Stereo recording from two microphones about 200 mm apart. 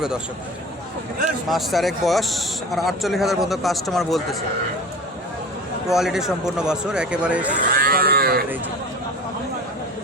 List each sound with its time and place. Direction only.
1.5 s speech: centre (ahead or behind)
5.9 s speech: centre (ahead or behind)
7.8 s cattle: 45° right (ahead or behind)